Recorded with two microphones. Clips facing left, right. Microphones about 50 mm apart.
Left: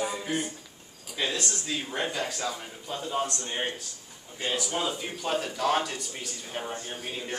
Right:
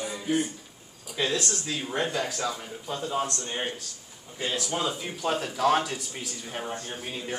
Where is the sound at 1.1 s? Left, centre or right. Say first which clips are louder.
Right 3 dB; centre.